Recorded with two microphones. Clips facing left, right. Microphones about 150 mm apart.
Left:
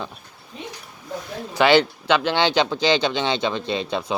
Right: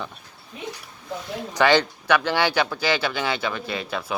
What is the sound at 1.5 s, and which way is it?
Speech, 15° left (ahead or behind).